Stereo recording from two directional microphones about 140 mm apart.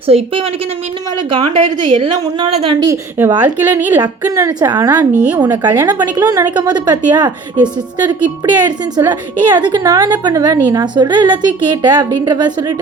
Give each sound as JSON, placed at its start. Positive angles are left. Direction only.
{"t": 0.1, "sound": "a woman's voice", "side_deg": -45}
{"t": 2.8, "sound": "a woman's voice", "side_deg": -20}
{"t": 4.3, "sound": "speech", "side_deg": -25}
{"t": 5.2, "sound": "a woman's voice", "side_deg": -10}
{"t": 5.8, "sound": "a woman's voice", "side_deg": -30}